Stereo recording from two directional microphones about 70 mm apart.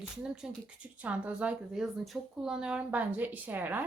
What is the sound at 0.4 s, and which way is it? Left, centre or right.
Speech, centre.